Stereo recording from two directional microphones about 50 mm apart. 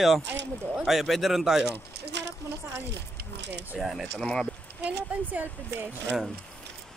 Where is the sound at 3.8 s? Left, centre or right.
Centre.